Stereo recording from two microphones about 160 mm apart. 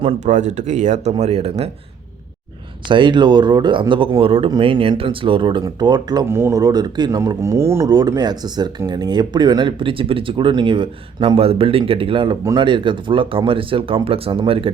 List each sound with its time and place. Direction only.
0.2 s speech: 50° right (ahead or behind)
2.8 s speech: 30° right (ahead or behind)